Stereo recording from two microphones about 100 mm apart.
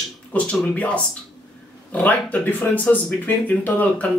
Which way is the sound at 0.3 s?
15° left (ahead or behind).